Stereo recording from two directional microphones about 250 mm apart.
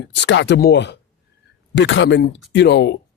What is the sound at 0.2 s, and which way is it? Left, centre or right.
Speech, left.